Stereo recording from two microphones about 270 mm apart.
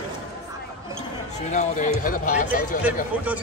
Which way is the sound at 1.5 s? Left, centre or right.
Left.